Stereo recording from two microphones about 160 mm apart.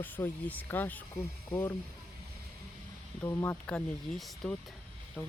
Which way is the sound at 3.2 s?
10° left (ahead or behind).